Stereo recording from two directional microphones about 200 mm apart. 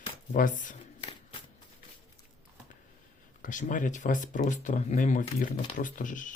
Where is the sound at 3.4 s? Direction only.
40° left (ahead or behind).